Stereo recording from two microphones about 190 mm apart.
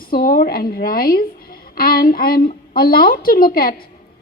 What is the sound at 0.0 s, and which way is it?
A woman's voice, 50° left (ahead or behind).